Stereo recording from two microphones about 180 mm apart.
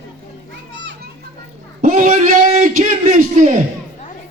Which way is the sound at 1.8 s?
45° right (ahead or behind).